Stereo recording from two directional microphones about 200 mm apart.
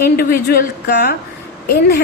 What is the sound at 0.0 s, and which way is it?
A woman's voice, 50° left (ahead or behind).